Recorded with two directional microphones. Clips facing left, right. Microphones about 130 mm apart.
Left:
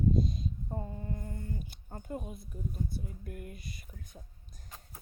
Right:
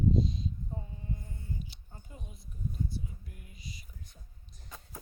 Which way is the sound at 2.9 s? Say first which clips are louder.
Left 2 dB; 55° left (ahead or behind).